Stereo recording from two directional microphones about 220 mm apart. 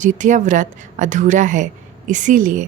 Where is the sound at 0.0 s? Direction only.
35° right (ahead or behind).